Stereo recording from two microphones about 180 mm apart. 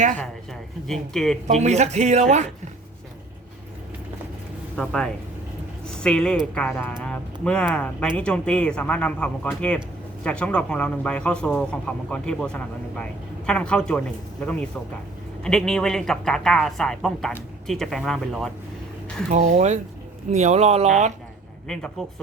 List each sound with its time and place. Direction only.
0.9 s speech: 5° left (ahead or behind)
1.5 s speech: 40° right (ahead or behind)
4.8 s speech: 5° left (ahead or behind)
19.3 s speech: 40° right (ahead or behind)
21.7 s speech: 5° left (ahead or behind)